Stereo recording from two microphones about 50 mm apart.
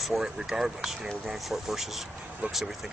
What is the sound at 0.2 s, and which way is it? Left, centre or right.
Speech, centre.